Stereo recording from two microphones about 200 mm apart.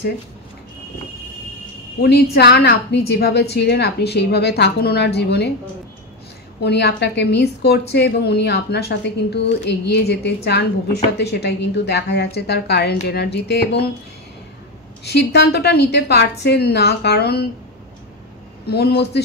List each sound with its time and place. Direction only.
2.0 s a woman's voice: 50° left (ahead or behind)
6.6 s a woman's voice: 55° left (ahead or behind)
15.0 s a woman's voice: 55° left (ahead or behind)
18.7 s speech: 55° left (ahead or behind)